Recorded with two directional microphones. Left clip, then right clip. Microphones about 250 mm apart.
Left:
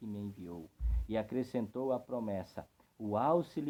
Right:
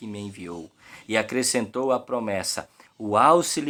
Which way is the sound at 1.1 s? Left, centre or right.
Centre.